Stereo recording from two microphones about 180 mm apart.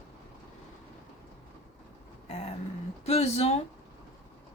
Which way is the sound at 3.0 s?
35° left (ahead or behind).